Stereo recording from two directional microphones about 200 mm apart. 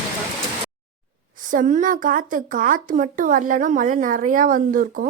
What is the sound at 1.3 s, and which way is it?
A woman's voice, 40° right (ahead or behind).